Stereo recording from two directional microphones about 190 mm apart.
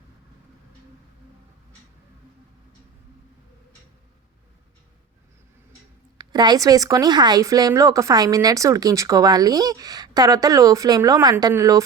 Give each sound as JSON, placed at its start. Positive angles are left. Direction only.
{"t": 6.1, "sound": "a woman's voice", "side_deg": -20}